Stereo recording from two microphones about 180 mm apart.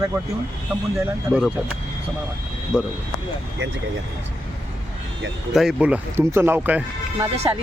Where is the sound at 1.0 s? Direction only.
Centre (ahead or behind).